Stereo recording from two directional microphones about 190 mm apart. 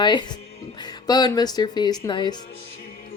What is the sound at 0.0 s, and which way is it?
Speech, 25° left (ahead or behind).